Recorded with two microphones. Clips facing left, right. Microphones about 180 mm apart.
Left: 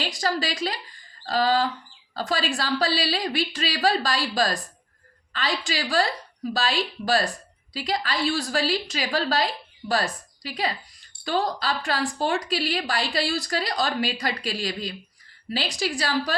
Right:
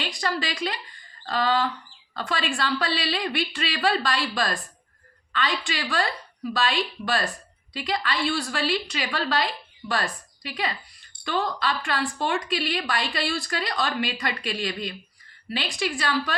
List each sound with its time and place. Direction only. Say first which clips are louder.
0.0 s a woman's voice: left 2 dB; 40° left (ahead or behind)